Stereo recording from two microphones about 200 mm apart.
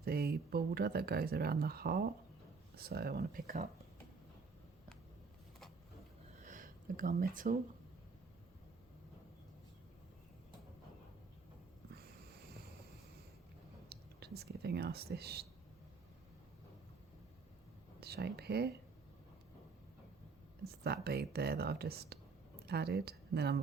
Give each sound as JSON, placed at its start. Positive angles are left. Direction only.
{"t": 0.0, "sound": "speech", "side_deg": -50}
{"t": 6.4, "sound": "a sound", "side_deg": -40}
{"t": 13.9, "sound": "speech", "side_deg": -55}
{"t": 18.0, "sound": "speech", "side_deg": -55}
{"t": 20.7, "sound": "speech", "side_deg": -50}